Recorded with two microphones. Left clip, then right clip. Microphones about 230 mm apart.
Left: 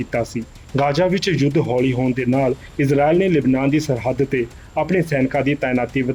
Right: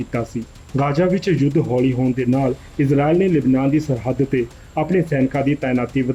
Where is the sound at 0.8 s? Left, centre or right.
Left.